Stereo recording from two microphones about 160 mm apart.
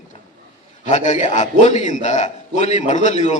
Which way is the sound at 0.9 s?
50° left (ahead or behind).